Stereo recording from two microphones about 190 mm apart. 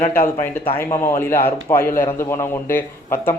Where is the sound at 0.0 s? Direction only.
50° left (ahead or behind).